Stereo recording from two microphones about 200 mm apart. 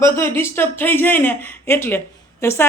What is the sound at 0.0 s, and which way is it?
A woman's voice, 10° left (ahead or behind).